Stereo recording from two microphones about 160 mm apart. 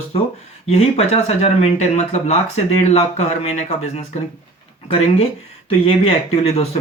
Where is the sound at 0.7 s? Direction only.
40° left (ahead or behind).